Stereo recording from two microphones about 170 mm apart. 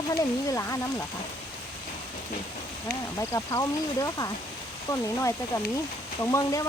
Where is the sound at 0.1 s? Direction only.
20° left (ahead or behind).